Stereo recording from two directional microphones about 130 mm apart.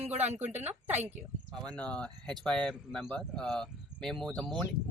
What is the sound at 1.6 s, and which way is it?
Speech, 10° left (ahead or behind).